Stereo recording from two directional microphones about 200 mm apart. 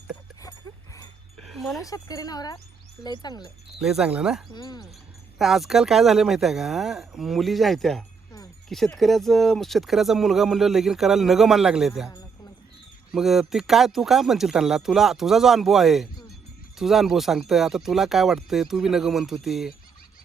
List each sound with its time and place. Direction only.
1.4 s a sound: centre (ahead or behind)
1.8 s speech: 15° left (ahead or behind)
3.8 s speech: 5° right (ahead or behind)
4.5 s speech: 20° left (ahead or behind)
5.4 s speech: centre (ahead or behind)